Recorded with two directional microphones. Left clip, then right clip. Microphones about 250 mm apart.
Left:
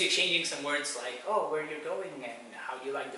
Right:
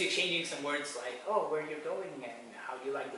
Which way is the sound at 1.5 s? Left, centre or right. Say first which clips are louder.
Left 2 dB; centre.